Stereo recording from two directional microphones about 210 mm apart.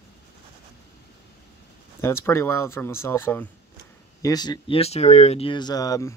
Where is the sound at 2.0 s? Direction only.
15° left (ahead or behind).